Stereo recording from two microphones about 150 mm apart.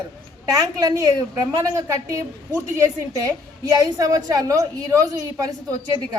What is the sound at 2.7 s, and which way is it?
A woman's voice, 20° right (ahead or behind).